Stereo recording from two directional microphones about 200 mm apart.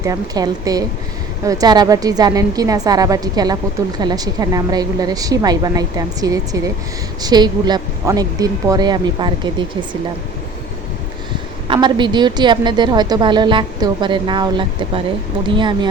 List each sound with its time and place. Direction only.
0.0 s a woman's voice: 20° right (ahead or behind)
11.7 s a woman's voice: 25° right (ahead or behind)